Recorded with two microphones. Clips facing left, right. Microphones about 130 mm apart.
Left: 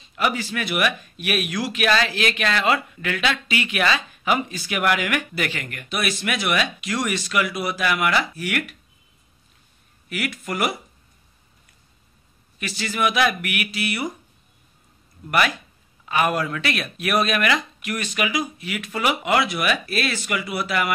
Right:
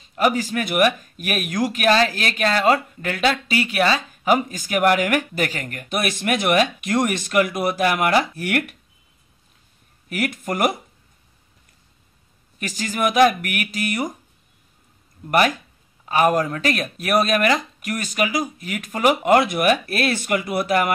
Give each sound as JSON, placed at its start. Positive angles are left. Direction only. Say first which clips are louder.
{"t": 0.0, "sound": "speech", "louder": "right 4 dB", "side_deg": -45}
{"t": 10.0, "sound": "speech", "louder": "right 4 dB", "side_deg": -50}
{"t": 12.5, "sound": "speech", "louder": "right 1 dB", "side_deg": -45}
{"t": 15.3, "sound": "speech", "louder": "right 3 dB", "side_deg": -45}